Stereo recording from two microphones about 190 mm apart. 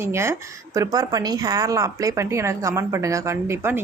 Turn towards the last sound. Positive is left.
turn(degrees=-10)  # may be behind; listen again after turning